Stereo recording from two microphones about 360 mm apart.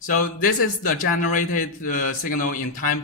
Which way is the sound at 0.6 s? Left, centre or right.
Left.